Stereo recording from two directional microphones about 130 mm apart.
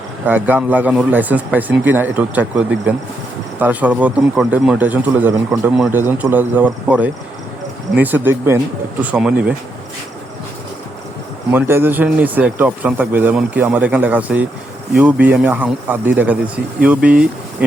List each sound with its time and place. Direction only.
0.3 s speech: 15° right (ahead or behind)
11.5 s speech: 15° right (ahead or behind)